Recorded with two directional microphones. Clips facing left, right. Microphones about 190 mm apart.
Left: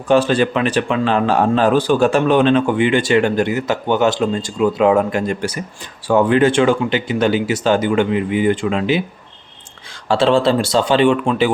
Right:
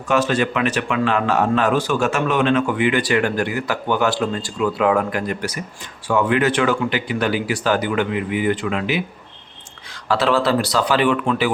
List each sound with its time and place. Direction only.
0.1 s speech: 30° left (ahead or behind)
10.1 s speech: 25° left (ahead or behind)